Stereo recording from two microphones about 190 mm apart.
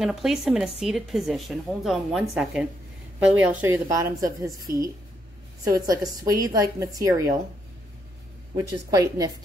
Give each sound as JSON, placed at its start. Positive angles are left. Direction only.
{"t": 0.0, "sound": "a woman's voice", "side_deg": 0}
{"t": 5.6, "sound": "a woman's voice", "side_deg": -20}
{"t": 8.5, "sound": "a woman's voice", "side_deg": -20}